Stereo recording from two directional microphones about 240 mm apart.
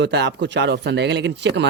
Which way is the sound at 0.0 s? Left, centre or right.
Right.